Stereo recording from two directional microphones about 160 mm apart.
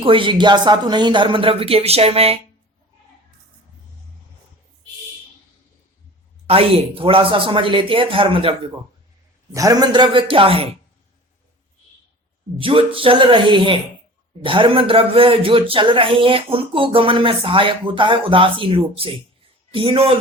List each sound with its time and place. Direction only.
0.0 s speech: 35° right (ahead or behind)
6.5 s speech: 35° right (ahead or behind)
9.6 s speech: 20° right (ahead or behind)
12.5 s speech: 35° right (ahead or behind)